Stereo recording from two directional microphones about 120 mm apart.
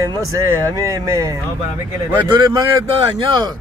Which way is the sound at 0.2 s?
30° right (ahead or behind).